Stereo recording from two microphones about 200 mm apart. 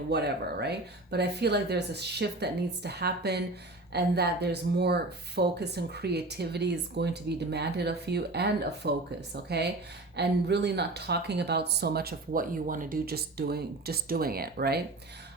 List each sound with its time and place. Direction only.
0.1 s speech: 55° right (ahead or behind)